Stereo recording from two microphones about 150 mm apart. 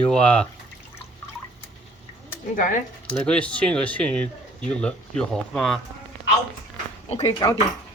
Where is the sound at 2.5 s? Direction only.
60° left (ahead or behind).